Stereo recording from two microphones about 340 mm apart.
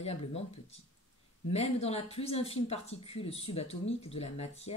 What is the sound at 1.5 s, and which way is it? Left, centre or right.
Speech, centre.